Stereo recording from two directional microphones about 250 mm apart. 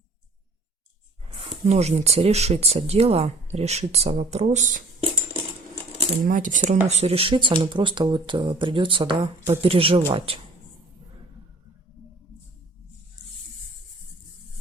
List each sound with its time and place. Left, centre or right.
1.3 s speech: right